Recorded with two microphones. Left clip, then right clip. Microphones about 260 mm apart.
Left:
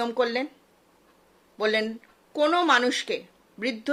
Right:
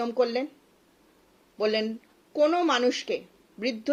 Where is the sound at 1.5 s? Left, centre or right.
Centre.